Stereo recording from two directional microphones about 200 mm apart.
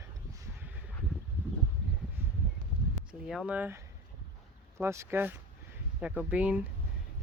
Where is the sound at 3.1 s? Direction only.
5° right (ahead or behind).